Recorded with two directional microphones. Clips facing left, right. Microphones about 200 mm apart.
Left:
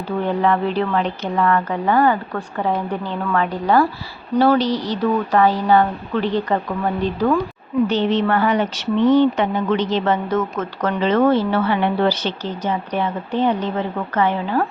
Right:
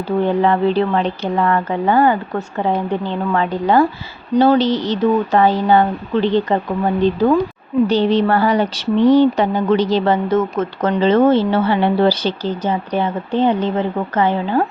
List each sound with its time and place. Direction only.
0.3 s speech: 30° right (ahead or behind)